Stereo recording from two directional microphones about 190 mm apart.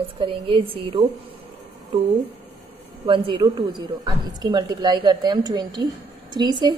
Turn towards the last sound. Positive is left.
turn(degrees=-25)  # may be behind; listen again after turning